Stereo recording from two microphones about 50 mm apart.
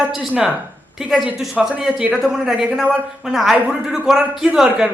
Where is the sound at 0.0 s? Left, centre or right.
Right.